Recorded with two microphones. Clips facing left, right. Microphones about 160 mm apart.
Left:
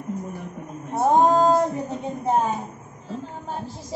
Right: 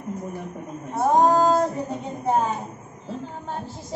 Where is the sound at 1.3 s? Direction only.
20° left (ahead or behind).